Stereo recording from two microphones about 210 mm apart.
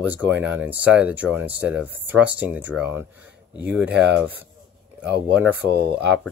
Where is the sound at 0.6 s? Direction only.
5° right (ahead or behind).